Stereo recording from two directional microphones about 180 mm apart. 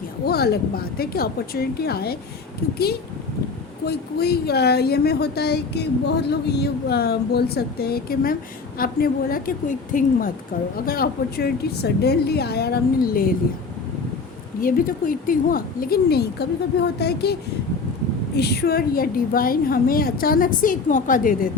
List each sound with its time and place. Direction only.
0.3 s a woman's voice: 60° left (ahead or behind)
3.8 s a woman's voice: 60° left (ahead or behind)
14.6 s a woman's voice: 50° left (ahead or behind)
18.3 s a woman's voice: 65° left (ahead or behind)